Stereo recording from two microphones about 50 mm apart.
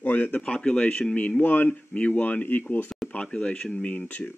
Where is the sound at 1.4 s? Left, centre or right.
Left.